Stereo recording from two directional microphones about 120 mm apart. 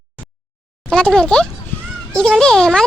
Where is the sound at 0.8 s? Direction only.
5° left (ahead or behind).